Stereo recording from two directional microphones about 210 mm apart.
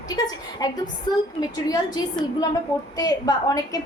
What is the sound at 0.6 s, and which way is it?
A woman's voice, 15° left (ahead or behind).